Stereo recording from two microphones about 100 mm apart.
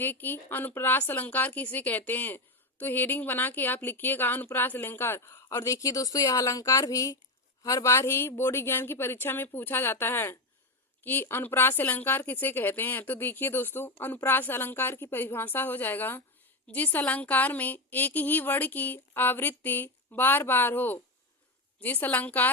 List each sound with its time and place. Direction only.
0.0 s a woman's voice: 20° left (ahead or behind)